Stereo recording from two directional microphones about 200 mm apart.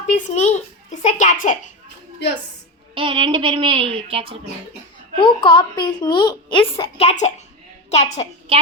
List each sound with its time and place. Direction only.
0.3 s a child's voice: 35° left (ahead or behind)
2.9 s speech: 25° right (ahead or behind)
5.1 s a woman's voice: 25° left (ahead or behind)